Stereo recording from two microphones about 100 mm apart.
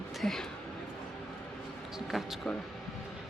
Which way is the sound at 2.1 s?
Centre (ahead or behind).